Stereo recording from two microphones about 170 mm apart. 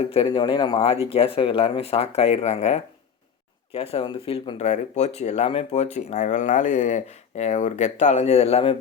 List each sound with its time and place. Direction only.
0.0 s speech: 35° left (ahead or behind)